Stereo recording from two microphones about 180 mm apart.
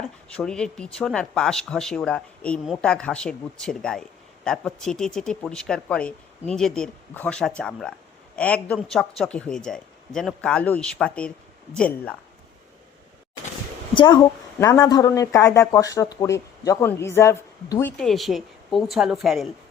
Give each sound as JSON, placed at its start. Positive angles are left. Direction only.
{"t": 0.3, "sound": "a woman's voice", "side_deg": 5}
{"t": 13.9, "sound": "a woman's voice", "side_deg": 25}